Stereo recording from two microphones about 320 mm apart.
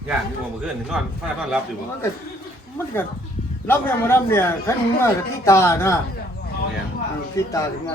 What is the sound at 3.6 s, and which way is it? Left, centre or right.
Speech, centre.